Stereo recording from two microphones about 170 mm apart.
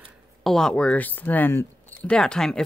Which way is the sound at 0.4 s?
Centre (ahead or behind).